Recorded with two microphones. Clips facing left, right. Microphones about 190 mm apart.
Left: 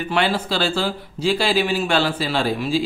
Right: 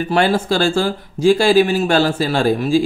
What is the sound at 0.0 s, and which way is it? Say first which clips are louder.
Speech: right 5 dB; 40° right (ahead or behind).